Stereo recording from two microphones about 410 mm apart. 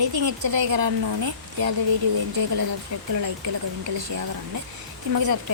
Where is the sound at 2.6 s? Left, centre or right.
Right.